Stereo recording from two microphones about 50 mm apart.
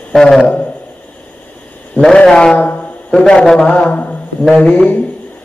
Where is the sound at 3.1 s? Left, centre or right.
Centre.